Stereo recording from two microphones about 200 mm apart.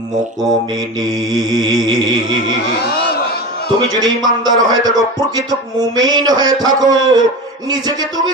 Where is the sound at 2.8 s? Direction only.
50° left (ahead or behind).